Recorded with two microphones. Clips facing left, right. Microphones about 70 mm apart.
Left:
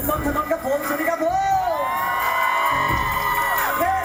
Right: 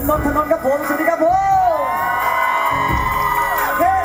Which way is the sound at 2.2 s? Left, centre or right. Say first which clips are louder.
Right 2 dB; centre.